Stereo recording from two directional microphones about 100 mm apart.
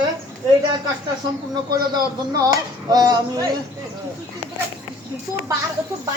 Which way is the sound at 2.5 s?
40° right (ahead or behind).